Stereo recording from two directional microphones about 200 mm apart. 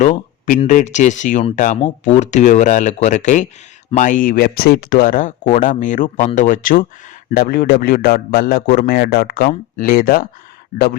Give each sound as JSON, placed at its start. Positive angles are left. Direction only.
{"t": 0.0, "sound": "a man's voice", "side_deg": 40}